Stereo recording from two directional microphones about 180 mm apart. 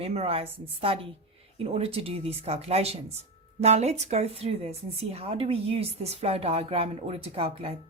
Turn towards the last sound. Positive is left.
turn(degrees=-35)  # may be behind; listen again after turning